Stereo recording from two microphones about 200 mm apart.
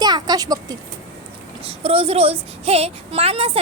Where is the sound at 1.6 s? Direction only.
30° right (ahead or behind).